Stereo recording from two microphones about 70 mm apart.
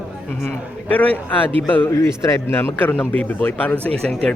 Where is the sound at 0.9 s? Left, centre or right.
Left.